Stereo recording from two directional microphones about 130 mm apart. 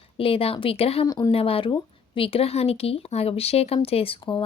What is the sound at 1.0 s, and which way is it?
Speech, 30° left (ahead or behind).